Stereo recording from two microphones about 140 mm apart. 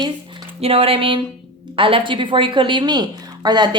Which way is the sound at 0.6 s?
45° right (ahead or behind).